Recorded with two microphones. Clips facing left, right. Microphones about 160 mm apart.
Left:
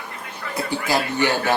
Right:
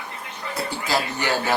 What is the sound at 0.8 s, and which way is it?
Speech, 20° left (ahead or behind).